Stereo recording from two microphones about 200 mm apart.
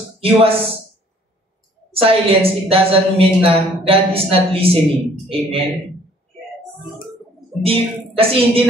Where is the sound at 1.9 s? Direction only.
30° right (ahead or behind).